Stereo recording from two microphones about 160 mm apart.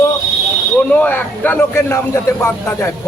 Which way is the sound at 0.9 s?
10° left (ahead or behind).